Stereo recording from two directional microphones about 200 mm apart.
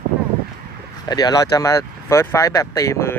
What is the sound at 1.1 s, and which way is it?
Speech, 20° left (ahead or behind).